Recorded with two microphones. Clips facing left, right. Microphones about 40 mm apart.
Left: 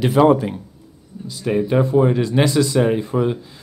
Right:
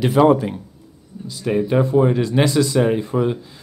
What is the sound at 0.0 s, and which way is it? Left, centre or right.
Speech, centre.